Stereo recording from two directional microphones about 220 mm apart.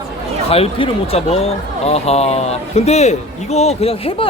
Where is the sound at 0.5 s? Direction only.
25° left (ahead or behind).